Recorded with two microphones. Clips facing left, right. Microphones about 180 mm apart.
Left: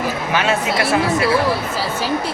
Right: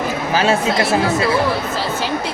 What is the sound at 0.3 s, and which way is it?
Speech, 30° right (ahead or behind).